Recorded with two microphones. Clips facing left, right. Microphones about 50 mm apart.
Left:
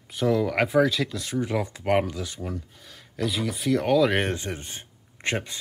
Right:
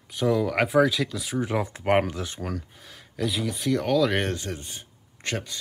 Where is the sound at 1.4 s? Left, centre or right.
Centre.